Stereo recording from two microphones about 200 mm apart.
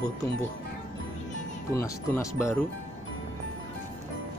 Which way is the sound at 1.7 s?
15° left (ahead or behind).